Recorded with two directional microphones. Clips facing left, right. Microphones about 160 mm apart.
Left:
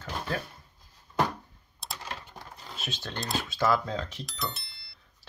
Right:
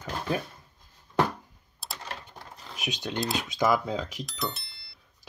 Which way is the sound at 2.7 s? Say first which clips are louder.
Right 5 dB; 15° right (ahead or behind).